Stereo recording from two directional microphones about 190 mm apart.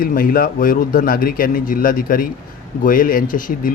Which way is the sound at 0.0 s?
50° left (ahead or behind).